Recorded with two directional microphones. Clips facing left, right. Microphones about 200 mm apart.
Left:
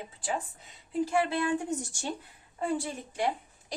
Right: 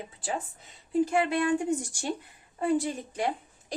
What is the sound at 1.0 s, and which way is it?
Speech, 20° right (ahead or behind).